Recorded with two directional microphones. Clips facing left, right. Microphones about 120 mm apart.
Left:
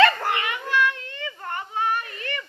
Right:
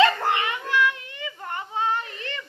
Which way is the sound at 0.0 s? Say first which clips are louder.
Even; 20° right (ahead or behind).